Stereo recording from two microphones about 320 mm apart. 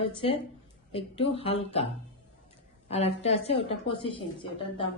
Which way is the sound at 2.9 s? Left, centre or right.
Centre.